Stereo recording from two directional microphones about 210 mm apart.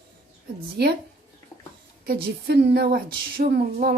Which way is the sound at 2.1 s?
50° right (ahead or behind).